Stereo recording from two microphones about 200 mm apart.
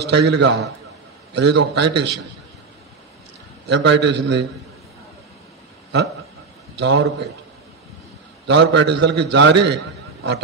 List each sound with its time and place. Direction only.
0.0 s a man's voice: 55° right (ahead or behind)
3.6 s a man's voice: 60° right (ahead or behind)
6.8 s a man's voice: 60° right (ahead or behind)
8.5 s a man's voice: 60° right (ahead or behind)